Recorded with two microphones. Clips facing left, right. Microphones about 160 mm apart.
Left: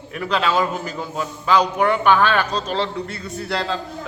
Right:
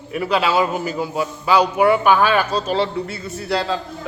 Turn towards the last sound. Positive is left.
turn(degrees=-5)  # may be behind; listen again after turning